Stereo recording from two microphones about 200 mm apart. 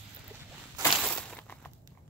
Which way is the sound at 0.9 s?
5° left (ahead or behind).